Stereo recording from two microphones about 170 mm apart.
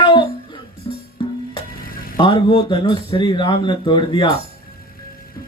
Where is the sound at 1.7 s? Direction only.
60° left (ahead or behind).